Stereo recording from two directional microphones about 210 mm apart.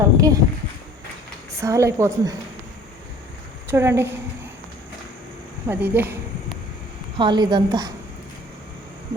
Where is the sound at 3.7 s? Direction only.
10° right (ahead or behind).